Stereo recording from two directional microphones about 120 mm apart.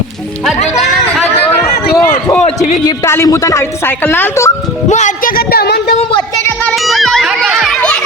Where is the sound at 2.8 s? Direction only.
25° left (ahead or behind).